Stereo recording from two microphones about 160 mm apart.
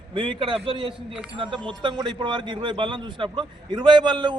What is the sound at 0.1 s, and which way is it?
A man's voice, 30° right (ahead or behind).